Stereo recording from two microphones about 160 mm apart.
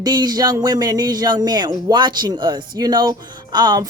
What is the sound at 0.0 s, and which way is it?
Speech, 25° right (ahead or behind).